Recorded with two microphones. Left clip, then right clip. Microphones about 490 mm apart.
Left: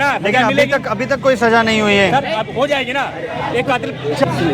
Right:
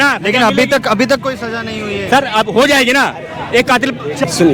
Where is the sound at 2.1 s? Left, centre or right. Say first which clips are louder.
Right 6 dB; right.